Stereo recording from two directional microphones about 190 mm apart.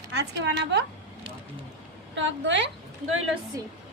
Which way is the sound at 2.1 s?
75° right (ahead or behind).